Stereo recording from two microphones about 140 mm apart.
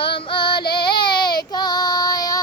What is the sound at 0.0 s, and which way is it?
Female singing, 40° left (ahead or behind).